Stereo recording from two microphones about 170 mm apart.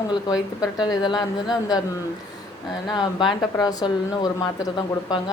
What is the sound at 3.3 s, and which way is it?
Speech, 25° left (ahead or behind).